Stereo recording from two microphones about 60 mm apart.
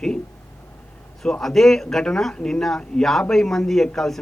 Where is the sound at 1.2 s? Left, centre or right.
Centre.